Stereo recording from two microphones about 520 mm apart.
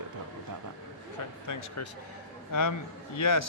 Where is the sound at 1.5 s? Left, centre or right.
Left.